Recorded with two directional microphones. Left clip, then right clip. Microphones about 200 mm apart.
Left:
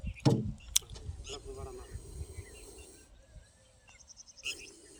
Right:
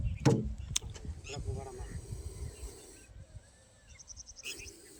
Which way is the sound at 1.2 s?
60° left (ahead or behind).